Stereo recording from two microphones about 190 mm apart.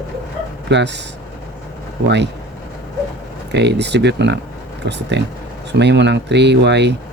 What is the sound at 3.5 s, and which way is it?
Speech, 65° right (ahead or behind).